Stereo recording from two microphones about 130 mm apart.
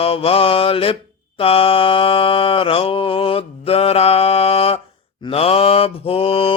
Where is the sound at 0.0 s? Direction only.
45° left (ahead or behind).